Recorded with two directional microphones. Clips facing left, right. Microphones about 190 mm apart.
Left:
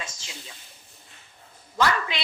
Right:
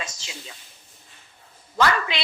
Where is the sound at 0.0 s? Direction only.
75° right (ahead or behind).